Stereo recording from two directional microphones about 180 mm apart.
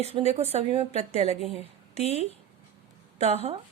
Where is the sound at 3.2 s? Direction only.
35° right (ahead or behind).